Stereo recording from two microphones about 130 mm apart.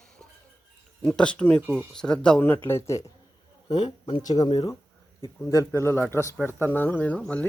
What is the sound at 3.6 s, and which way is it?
Speech, 45° left (ahead or behind).